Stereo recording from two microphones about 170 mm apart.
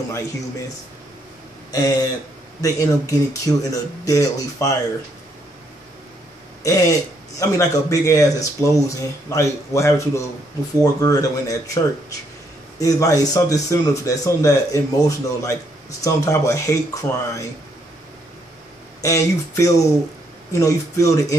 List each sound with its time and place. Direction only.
1.7 s speech: 20° left (ahead or behind)
6.6 s speech: 20° left (ahead or behind)
18.9 s speech: 20° left (ahead or behind)